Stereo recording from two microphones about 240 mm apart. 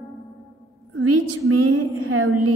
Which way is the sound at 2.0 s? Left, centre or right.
Right.